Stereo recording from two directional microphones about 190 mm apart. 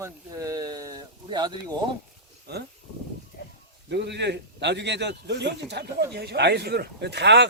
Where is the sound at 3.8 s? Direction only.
65° right (ahead or behind).